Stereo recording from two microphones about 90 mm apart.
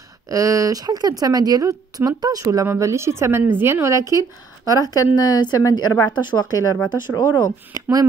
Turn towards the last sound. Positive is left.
turn(degrees=-40)  # may be behind; listen again after turning